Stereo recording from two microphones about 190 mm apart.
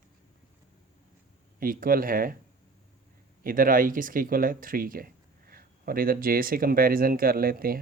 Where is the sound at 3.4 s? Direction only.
45° right (ahead or behind).